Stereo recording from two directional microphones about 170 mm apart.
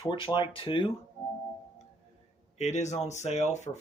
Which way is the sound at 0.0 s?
30° left (ahead or behind).